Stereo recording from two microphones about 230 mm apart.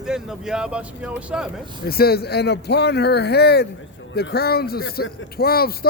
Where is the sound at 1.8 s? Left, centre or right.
Left.